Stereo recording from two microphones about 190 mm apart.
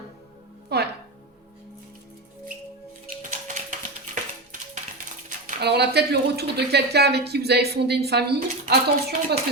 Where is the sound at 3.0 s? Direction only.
45° right (ahead or behind).